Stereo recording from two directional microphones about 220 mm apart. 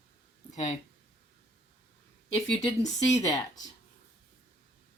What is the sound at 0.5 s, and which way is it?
Speech, 35° left (ahead or behind).